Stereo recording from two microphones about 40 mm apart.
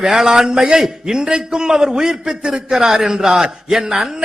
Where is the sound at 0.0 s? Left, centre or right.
Centre.